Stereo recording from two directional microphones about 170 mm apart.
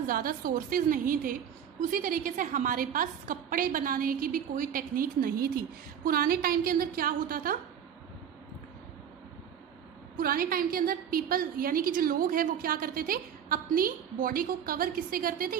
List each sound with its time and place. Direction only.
0.1 s a woman's voice: 55° right (ahead or behind)
10.2 s a woman's voice: 55° right (ahead or behind)